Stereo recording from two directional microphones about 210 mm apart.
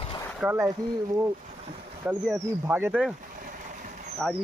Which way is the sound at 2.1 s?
5° right (ahead or behind).